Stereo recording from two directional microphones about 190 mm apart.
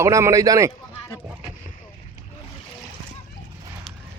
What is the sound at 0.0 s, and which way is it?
Speech, 15° right (ahead or behind).